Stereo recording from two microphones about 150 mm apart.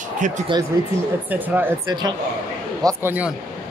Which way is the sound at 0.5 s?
30° right (ahead or behind).